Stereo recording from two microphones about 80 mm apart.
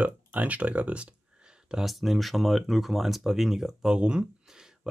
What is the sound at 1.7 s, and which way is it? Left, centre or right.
Speech, centre.